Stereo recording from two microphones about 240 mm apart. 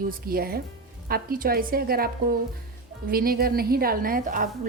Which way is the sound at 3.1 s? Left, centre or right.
Right.